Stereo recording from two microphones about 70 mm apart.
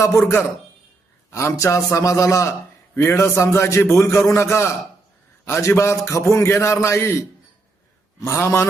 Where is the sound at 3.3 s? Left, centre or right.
Left.